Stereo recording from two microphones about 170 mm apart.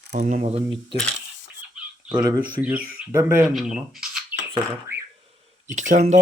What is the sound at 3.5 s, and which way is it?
Rub, centre (ahead or behind).